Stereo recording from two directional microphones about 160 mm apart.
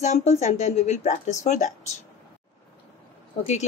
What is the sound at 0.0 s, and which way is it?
A woman's voice, 45° left (ahead or behind).